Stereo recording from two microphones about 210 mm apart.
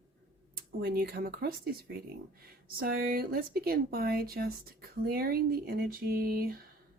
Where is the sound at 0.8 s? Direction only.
50° right (ahead or behind).